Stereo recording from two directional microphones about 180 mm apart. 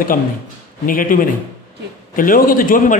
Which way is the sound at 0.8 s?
50° left (ahead or behind).